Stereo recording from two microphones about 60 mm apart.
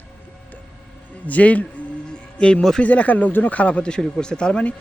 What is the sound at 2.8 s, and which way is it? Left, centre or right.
Speech, left.